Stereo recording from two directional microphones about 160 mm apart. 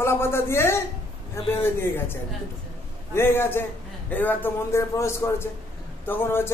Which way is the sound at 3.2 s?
15° left (ahead or behind).